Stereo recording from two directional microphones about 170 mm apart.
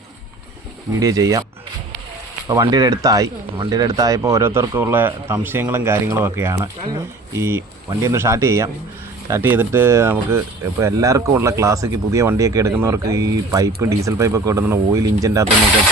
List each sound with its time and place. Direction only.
0.9 s speech: 20° right (ahead or behind)
2.5 s speech: 20° right (ahead or behind)